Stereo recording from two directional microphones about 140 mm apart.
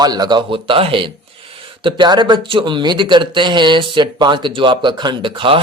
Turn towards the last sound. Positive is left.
turn(degrees=-40)  # may be behind; listen again after turning